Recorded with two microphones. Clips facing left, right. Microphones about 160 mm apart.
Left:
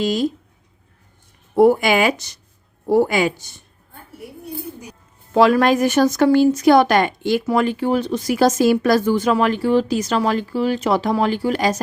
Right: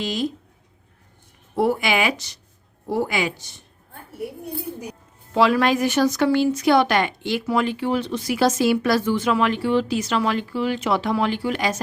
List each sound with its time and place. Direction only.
0.0 s speech: 45° left (ahead or behind)
1.5 s speech: 45° left (ahead or behind)
5.3 s speech: 45° left (ahead or behind)